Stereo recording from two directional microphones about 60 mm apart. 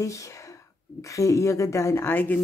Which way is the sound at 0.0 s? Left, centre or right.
Left.